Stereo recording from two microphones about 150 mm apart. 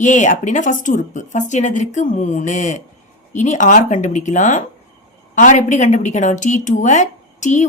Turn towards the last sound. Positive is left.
turn(degrees=55)  # may be behind; listen again after turning